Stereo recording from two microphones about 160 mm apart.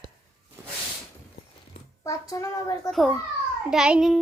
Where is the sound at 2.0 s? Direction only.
20° left (ahead or behind).